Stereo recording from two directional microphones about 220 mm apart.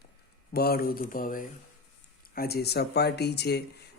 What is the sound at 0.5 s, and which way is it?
Speech, 45° left (ahead or behind).